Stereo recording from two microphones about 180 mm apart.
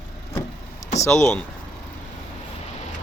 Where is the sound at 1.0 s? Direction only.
15° left (ahead or behind).